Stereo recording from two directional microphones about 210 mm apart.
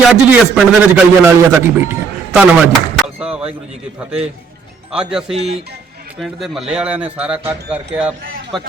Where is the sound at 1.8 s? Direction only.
10° right (ahead or behind).